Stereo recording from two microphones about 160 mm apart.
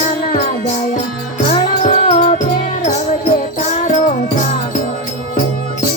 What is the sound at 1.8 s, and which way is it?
Music, 50° left (ahead or behind).